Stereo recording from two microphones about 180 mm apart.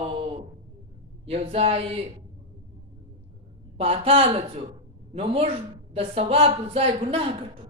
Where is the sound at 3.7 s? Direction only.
35° right (ahead or behind).